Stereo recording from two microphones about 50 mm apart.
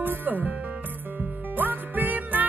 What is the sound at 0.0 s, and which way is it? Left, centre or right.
Music, right.